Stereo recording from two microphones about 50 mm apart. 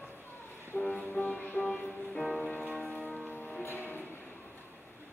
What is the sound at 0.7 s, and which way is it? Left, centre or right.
Music, left.